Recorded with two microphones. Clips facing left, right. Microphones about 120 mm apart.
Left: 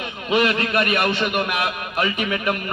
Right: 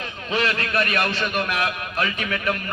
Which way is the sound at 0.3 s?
15° left (ahead or behind).